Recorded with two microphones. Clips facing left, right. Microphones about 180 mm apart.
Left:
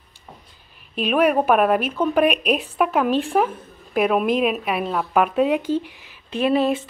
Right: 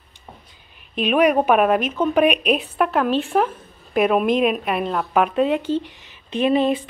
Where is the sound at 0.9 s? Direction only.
5° left (ahead or behind).